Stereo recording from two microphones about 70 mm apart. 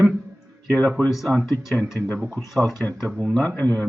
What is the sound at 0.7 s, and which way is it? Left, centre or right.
Speech, centre.